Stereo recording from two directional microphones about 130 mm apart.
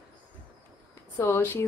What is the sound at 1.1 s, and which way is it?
Speech, 25° left (ahead or behind).